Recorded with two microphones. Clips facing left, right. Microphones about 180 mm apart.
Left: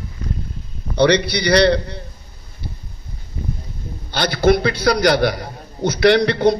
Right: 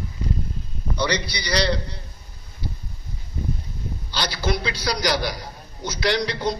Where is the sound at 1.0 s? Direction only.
65° left (ahead or behind).